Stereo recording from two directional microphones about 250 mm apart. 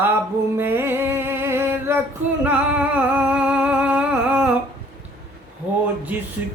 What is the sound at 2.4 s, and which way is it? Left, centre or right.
Music, centre.